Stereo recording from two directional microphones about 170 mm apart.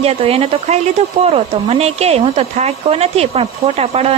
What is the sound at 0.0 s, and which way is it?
Speech, 35° right (ahead or behind).